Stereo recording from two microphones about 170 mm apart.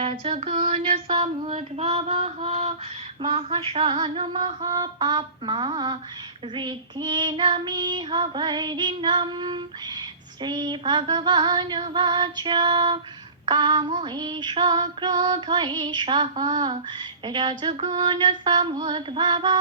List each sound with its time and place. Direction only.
0.0 s child singing: 35° right (ahead or behind)